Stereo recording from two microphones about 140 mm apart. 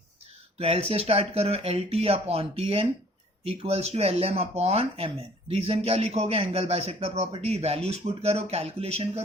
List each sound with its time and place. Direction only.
0.6 s speech: 45° right (ahead or behind)